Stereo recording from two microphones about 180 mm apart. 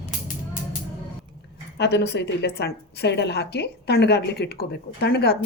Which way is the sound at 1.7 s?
70° left (ahead or behind).